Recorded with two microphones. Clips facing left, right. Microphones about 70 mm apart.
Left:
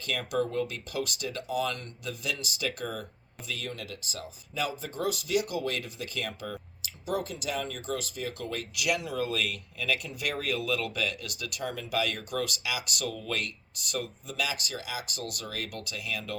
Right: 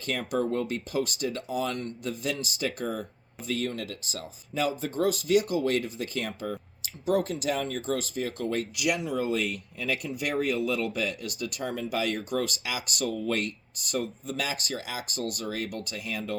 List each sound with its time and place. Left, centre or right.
0.0 s speech: right
3.4 s speech: right